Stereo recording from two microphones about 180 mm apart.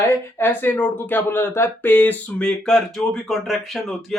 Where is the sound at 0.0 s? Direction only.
15° left (ahead or behind).